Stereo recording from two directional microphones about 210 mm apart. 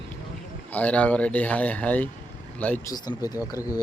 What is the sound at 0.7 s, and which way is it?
Speech, 5° left (ahead or behind).